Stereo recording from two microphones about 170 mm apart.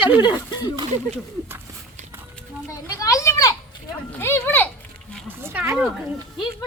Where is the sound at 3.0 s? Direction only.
15° left (ahead or behind).